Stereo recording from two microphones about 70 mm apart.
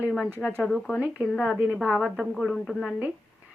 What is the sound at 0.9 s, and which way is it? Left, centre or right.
A woman's voice, centre.